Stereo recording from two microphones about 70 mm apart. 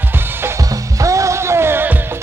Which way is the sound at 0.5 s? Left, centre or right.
Right.